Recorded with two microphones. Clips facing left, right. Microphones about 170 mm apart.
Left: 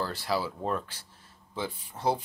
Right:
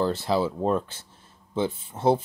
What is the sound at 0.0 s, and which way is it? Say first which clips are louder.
Speech: right 7 dB; 25° right (ahead or behind).